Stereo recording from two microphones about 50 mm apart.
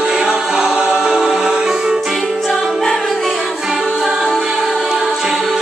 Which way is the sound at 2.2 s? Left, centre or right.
Centre.